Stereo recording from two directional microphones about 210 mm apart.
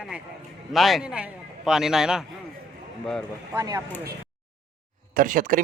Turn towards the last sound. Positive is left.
turn(degrees=-40)  # may be behind; listen again after turning